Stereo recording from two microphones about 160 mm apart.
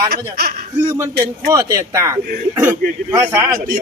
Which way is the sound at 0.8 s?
15° right (ahead or behind).